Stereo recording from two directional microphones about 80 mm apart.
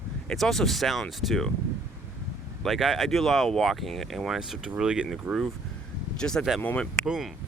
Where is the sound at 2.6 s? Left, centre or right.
Centre.